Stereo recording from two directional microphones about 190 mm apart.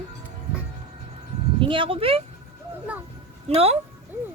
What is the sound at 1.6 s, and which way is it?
Speech, 25° right (ahead or behind).